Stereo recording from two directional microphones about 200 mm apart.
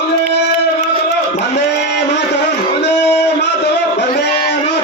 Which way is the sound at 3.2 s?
60° left (ahead or behind).